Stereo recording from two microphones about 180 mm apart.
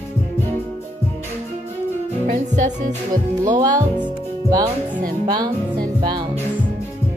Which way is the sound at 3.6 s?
20° right (ahead or behind).